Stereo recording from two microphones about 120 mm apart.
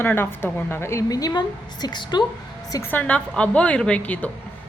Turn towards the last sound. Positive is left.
turn(degrees=10)  # may be behind; listen again after turning